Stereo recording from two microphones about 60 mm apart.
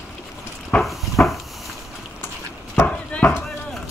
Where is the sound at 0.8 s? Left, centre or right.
Centre.